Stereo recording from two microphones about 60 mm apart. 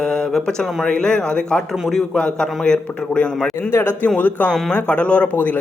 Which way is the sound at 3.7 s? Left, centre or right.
Left.